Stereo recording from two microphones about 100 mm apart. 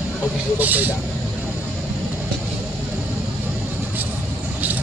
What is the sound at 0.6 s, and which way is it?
Speech, 15° right (ahead or behind).